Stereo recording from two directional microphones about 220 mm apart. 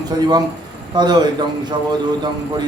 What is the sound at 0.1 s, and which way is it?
A man's voice, 15° right (ahead or behind).